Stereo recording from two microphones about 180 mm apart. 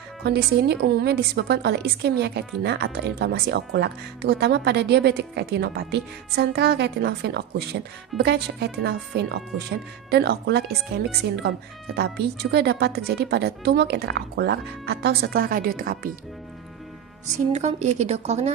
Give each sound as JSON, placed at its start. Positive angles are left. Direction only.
{"t": 0.2, "sound": "a woman's voice", "side_deg": -65}
{"t": 17.3, "sound": "a woman's voice", "side_deg": -40}